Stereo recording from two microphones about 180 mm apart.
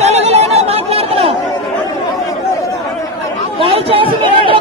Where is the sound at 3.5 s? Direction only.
30° right (ahead or behind).